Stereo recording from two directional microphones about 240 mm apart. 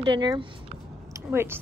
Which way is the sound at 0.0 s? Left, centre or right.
Centre.